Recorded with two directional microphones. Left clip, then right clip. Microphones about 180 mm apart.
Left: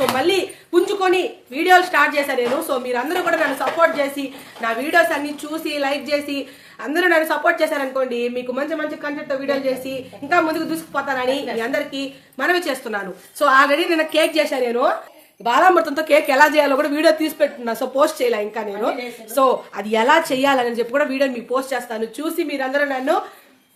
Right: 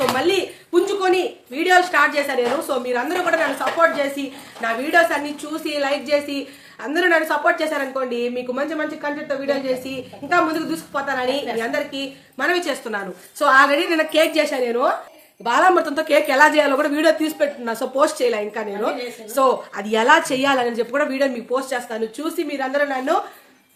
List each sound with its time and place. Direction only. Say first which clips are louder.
0.2 s a woman's voice: left 1 dB; 20° left (ahead or behind)